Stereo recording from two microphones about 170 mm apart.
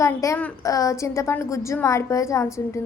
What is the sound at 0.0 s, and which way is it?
A woman's voice, 20° left (ahead or behind).